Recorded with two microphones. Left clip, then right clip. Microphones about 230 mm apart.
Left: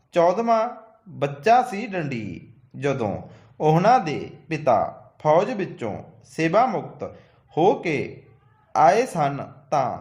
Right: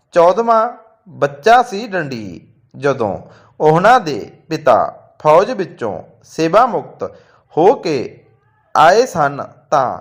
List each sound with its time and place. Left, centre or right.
0.1 s a man's voice: centre